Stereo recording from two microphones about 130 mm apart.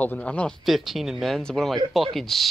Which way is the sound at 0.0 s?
10° left (ahead or behind).